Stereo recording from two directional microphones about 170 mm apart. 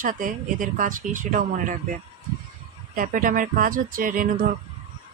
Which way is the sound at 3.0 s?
55° right (ahead or behind).